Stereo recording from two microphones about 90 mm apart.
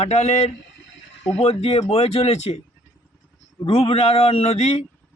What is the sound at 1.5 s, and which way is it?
Speech, 90° left.